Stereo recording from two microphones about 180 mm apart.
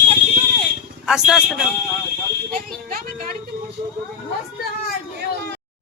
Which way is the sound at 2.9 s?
55° right (ahead or behind).